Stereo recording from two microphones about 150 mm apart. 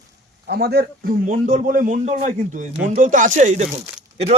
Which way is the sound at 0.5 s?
90° right.